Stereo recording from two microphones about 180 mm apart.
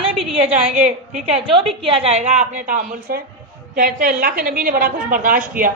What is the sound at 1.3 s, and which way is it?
A woman's voice, 30° right (ahead or behind).